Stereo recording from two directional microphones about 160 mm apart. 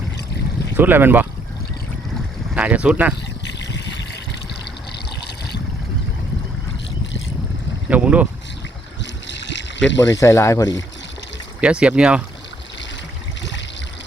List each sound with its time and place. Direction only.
0.8 s speech: 10° right (ahead or behind)
2.6 s speech: 5° right (ahead or behind)
3.4 s a sound: 90° left
7.9 s speech: 10° right (ahead or behind)
9.2 s a sound: 90° left
10.1 s speech: 20° left (ahead or behind)
11.6 s speech: 5° right (ahead or behind)